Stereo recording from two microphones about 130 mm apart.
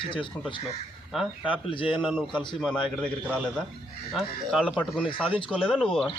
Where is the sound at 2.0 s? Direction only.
5° left (ahead or behind).